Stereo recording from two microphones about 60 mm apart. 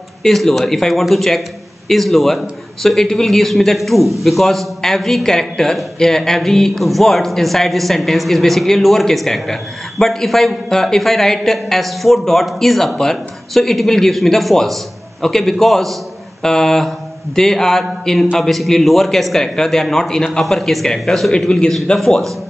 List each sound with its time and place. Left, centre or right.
0.2 s a man's voice: centre
21.9 s a man's voice: centre